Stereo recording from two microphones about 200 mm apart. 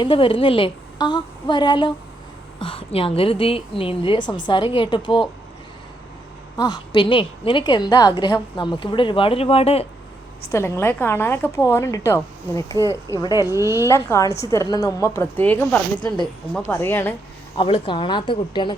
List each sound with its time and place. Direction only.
0.0 s a woman's voice: 25° left (ahead or behind)
6.6 s a woman's voice: 20° left (ahead or behind)
10.5 s a woman's voice: 10° left (ahead or behind)
13.5 s speech: 15° right (ahead or behind)
13.8 s a woman's voice: 15° left (ahead or behind)
17.6 s a woman's voice: 25° left (ahead or behind)